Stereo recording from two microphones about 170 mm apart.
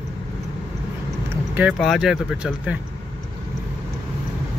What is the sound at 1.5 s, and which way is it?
Speech, 5° right (ahead or behind).